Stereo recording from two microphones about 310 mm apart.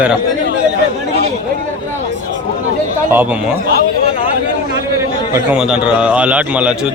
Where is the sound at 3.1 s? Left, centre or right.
Centre.